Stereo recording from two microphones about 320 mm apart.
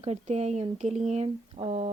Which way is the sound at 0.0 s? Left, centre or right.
Centre.